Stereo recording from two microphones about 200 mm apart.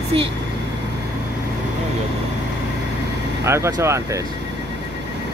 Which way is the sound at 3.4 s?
15° right (ahead or behind).